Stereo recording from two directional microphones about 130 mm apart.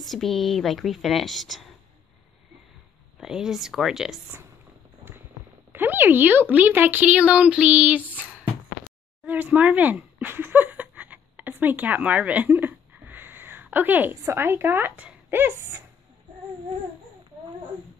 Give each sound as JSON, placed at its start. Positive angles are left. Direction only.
{"t": 0.0, "sound": "a woman's voice", "side_deg": 0}
{"t": 3.2, "sound": "a woman's voice", "side_deg": -5}
{"t": 5.7, "sound": "speech", "side_deg": -15}